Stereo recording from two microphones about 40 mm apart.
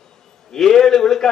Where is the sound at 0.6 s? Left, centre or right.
Centre.